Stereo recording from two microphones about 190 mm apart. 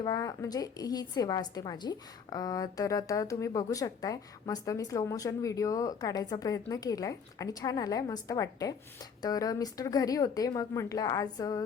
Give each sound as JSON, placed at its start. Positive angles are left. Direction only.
{"t": 0.0, "sound": "a woman's voice", "side_deg": 20}